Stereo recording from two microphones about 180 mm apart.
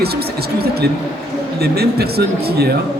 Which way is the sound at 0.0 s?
60° right (ahead or behind).